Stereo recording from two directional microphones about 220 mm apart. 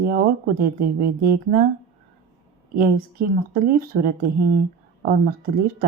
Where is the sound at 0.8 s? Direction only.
40° right (ahead or behind).